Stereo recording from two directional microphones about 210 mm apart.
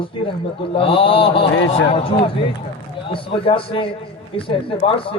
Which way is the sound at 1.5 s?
65° left (ahead or behind).